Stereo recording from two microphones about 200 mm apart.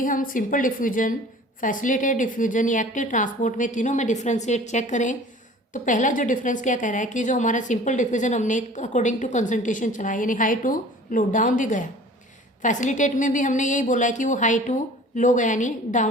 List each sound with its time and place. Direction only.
0.0 s a woman's voice: 45° left (ahead or behind)